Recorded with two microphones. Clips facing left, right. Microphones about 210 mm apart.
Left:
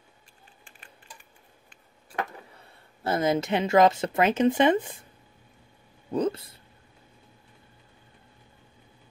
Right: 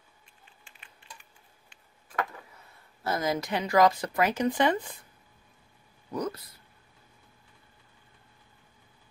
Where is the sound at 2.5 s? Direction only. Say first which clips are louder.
Left 3 dB; 30° left (ahead or behind).